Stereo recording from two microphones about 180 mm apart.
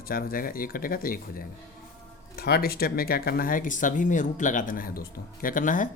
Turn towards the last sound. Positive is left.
turn(degrees=45)  # may be behind; listen again after turning